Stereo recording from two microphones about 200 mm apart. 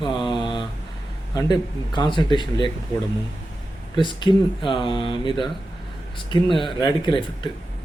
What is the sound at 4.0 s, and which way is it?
Speech, 25° left (ahead or behind).